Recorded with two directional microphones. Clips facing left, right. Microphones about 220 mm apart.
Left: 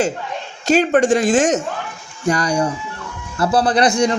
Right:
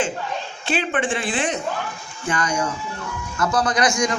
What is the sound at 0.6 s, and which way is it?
Speech, 40° left (ahead or behind).